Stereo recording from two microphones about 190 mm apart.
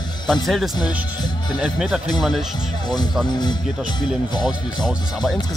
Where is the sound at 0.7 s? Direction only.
20° left (ahead or behind).